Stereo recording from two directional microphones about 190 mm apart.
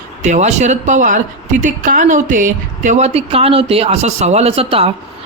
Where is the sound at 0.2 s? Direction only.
35° right (ahead or behind).